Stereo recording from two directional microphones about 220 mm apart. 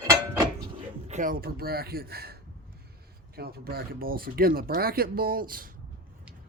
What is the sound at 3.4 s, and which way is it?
Speech, 45° right (ahead or behind).